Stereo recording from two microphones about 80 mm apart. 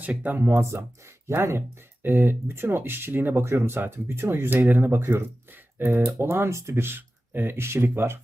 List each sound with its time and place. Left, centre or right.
0.0 s speech: centre